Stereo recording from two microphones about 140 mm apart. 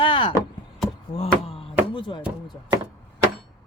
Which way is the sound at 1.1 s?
45° left (ahead or behind).